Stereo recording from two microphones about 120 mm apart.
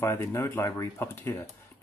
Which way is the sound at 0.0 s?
25° left (ahead or behind).